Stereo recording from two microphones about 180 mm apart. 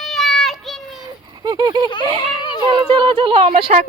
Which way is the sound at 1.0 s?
20° right (ahead or behind).